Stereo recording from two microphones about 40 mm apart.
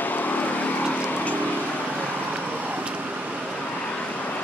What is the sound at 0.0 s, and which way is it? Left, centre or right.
Vehicle, left.